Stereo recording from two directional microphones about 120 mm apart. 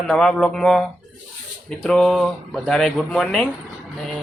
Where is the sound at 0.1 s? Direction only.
5° left (ahead or behind).